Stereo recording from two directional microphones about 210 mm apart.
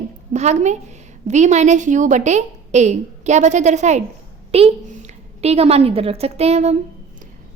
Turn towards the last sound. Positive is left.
turn(degrees=-30)  # may be behind; listen again after turning